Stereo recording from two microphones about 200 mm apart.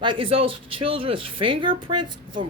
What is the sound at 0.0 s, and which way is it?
Speech, 25° right (ahead or behind).